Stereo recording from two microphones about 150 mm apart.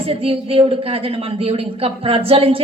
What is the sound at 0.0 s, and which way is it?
Speech, 40° right (ahead or behind).